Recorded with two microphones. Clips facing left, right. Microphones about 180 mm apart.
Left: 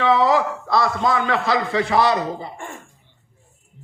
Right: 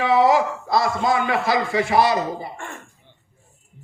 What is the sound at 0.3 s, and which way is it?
Speech, 20° right (ahead or behind).